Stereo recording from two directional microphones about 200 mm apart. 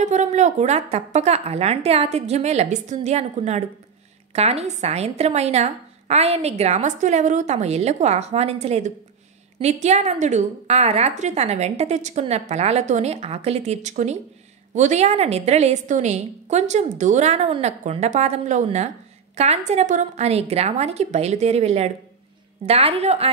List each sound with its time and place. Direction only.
0.0 s a woman's voice: 35° right (ahead or behind)